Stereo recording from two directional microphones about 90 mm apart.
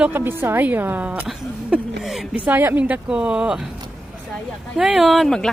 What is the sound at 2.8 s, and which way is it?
Speech, 10° right (ahead or behind).